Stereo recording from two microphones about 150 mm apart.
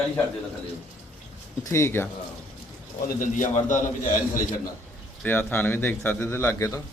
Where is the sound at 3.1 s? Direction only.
60° left (ahead or behind).